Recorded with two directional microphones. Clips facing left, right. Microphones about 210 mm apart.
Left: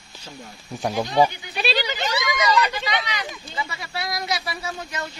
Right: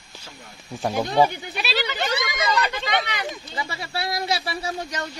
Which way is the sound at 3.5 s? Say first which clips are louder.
Right 1 dB; 30° right (ahead or behind).